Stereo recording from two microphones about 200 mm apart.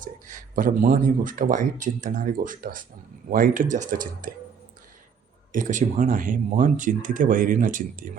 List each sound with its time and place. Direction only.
0.0 s speech: 40° right (ahead or behind)
5.5 s speech: 40° right (ahead or behind)